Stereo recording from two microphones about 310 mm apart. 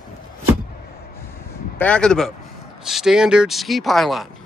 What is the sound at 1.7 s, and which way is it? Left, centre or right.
Speech, centre.